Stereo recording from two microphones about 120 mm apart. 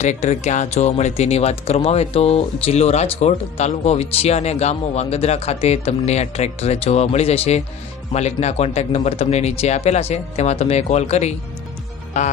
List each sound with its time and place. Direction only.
0.0 s speech: 80° left
12.1 s music: 75° left (ahead or behind)